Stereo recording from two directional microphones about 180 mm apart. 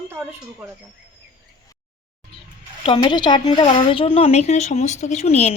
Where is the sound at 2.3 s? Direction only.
30° left (ahead or behind).